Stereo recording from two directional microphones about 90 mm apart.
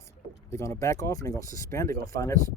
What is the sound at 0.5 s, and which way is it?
Speech, 35° left (ahead or behind).